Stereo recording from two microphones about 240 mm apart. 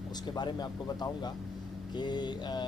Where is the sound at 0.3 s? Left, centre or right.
Centre.